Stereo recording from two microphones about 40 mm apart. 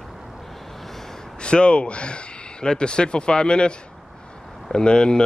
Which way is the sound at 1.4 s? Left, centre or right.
Left.